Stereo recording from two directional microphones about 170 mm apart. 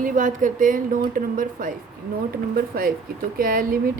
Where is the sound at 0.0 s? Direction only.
50° right (ahead or behind).